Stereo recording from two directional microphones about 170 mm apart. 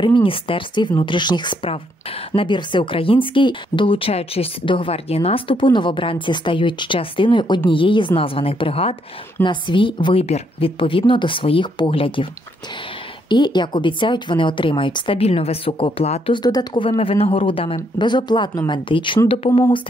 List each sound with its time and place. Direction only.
0.0 s a woman's voice: 30° left (ahead or behind)
13.3 s a woman's voice: 25° left (ahead or behind)